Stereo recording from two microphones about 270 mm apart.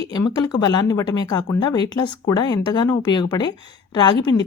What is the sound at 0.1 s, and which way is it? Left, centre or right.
A woman's voice, centre.